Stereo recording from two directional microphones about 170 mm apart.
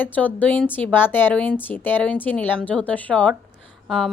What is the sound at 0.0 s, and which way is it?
A woman's voice, 10° left (ahead or behind).